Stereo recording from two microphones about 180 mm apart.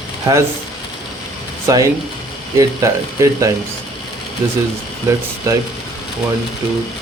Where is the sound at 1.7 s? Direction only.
15° right (ahead or behind).